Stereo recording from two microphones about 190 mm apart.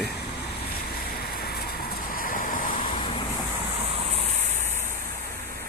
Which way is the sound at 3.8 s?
30° right (ahead or behind).